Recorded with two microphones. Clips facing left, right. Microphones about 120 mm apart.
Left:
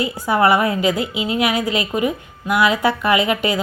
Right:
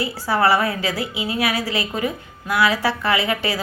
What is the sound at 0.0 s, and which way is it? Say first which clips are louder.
A woman's voice: left 3 dB; 20° left (ahead or behind).